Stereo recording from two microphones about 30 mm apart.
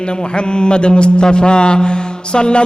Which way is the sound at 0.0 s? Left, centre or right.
Left.